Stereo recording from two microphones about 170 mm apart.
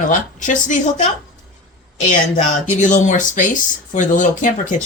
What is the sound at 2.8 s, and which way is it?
Speech, 45° left (ahead or behind).